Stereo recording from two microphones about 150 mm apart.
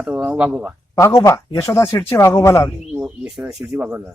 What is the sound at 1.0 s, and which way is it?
Speech, 20° left (ahead or behind).